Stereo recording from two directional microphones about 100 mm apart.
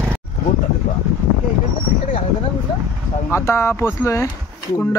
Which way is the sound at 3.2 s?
25° left (ahead or behind).